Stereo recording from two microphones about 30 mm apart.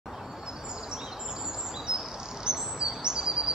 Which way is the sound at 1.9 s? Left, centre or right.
Centre.